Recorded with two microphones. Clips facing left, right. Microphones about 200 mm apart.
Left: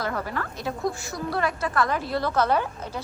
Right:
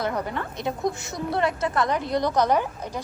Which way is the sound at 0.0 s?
20° right (ahead or behind).